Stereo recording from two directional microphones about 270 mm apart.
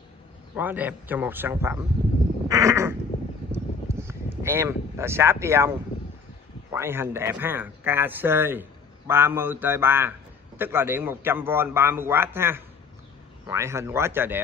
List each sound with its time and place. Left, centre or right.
0.6 s speech: centre
2.4 s a sound: centre
4.4 s speech: centre